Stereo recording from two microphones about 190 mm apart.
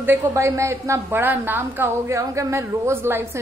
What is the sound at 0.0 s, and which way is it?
A woman's voice, 15° right (ahead or behind).